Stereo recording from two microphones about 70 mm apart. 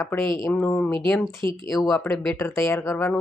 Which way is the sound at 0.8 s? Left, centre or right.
Centre.